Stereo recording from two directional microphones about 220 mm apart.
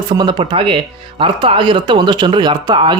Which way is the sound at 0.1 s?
20° right (ahead or behind).